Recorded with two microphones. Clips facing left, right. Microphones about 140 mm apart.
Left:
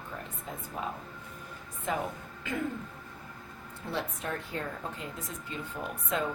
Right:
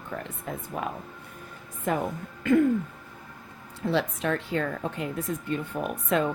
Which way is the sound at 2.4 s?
55° right (ahead or behind).